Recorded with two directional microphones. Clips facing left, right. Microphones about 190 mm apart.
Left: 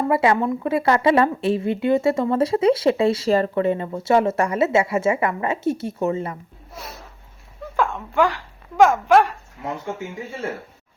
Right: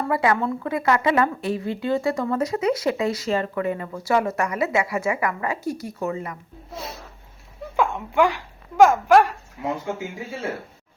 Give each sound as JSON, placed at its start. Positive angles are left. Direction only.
{"t": 0.0, "sound": "a woman's voice", "side_deg": 25}
{"t": 7.8, "sound": "speech", "side_deg": -15}
{"t": 8.8, "sound": "speech", "side_deg": 0}